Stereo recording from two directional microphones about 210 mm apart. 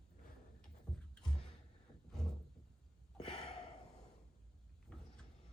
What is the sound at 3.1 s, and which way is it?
Gasp, 30° left (ahead or behind).